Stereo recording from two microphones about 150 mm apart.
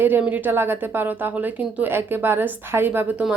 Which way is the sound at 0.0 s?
10° right (ahead or behind).